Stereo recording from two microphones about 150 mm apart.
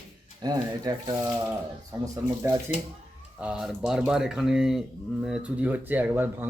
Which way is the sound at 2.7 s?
15° right (ahead or behind).